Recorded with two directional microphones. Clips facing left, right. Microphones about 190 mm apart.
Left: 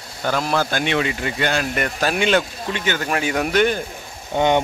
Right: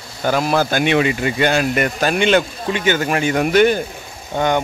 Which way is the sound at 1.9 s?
Centre (ahead or behind).